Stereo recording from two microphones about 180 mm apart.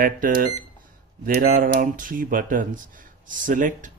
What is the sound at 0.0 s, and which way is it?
Speech, 50° right (ahead or behind).